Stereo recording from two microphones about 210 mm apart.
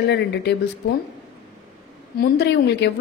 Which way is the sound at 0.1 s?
55° left (ahead or behind).